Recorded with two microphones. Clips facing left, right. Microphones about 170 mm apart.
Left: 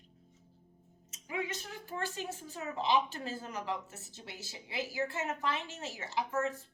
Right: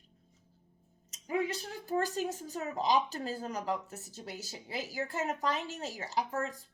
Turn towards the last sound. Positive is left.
turn(degrees=-35)  # may be behind; listen again after turning